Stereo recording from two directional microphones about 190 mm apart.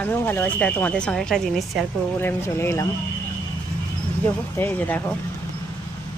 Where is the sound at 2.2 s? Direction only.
15° left (ahead or behind).